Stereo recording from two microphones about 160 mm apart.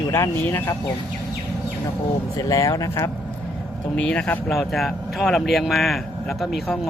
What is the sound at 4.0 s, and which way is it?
Speech, 5° left (ahead or behind).